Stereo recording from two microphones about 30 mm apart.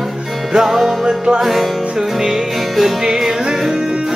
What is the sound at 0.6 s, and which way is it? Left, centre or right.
Music, centre.